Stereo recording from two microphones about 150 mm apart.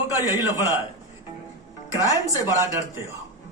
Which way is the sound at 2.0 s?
20° right (ahead or behind).